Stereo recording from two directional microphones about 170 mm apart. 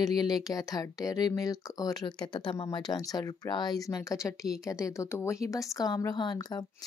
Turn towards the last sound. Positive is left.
turn(degrees=25)  # may be behind; listen again after turning